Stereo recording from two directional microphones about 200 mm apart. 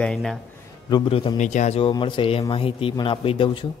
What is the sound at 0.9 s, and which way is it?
Speech, 25° left (ahead or behind).